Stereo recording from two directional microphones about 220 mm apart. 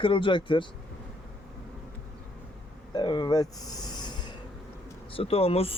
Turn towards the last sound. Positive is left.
turn(degrees=25)  # may be behind; listen again after turning